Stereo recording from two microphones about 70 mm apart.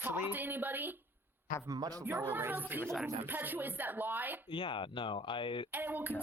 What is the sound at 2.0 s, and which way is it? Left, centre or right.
Speech, right.